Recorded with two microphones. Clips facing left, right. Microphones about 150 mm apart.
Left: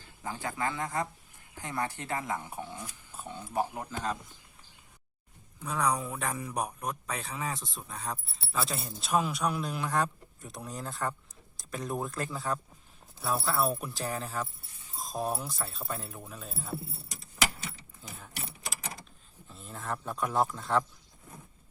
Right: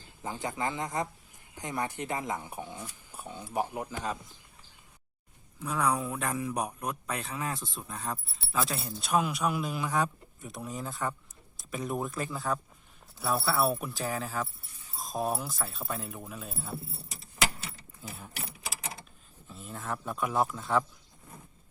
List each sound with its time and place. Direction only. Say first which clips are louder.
0.2 s speech: right 1 dB; 20° right (ahead or behind)
5.6 s speech: right 1 dB; centre (ahead or behind)
18.2 s keys jangling: right 1 dB; 5° right (ahead or behind)
19.5 s speech: even; centre (ahead or behind)